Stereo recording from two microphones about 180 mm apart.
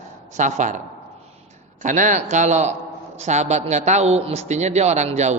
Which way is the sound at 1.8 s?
45° right (ahead or behind).